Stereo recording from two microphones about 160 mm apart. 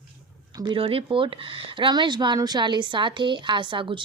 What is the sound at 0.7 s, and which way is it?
Speech, 35° right (ahead or behind).